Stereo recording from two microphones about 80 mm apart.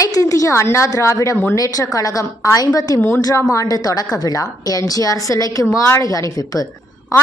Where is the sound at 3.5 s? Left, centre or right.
Left.